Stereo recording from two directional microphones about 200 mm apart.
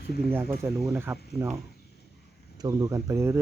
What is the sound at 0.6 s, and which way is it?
Speech, centre (ahead or behind).